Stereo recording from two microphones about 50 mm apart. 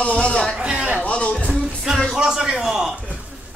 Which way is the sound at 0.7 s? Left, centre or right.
Right.